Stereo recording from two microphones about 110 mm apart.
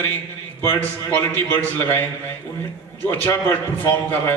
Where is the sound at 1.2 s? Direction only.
20° left (ahead or behind).